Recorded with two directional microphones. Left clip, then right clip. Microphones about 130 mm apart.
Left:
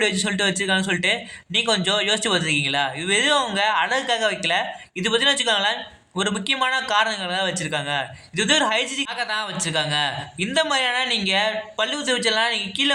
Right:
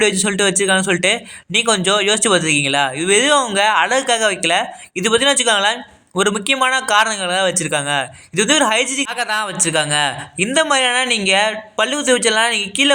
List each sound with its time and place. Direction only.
0.0 s a man's voice: 35° right (ahead or behind)